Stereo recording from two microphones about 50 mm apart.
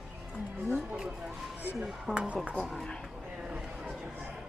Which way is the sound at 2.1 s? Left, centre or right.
Centre.